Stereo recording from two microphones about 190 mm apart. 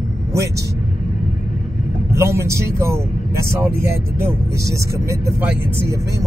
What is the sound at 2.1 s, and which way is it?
Speech, 15° right (ahead or behind).